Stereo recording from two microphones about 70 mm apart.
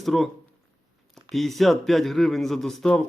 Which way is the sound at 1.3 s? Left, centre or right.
Centre.